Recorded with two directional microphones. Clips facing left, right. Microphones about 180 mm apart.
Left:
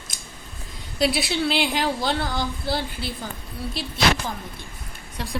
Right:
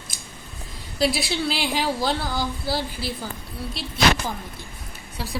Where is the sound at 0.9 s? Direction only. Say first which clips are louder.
Left 1 dB; centre (ahead or behind).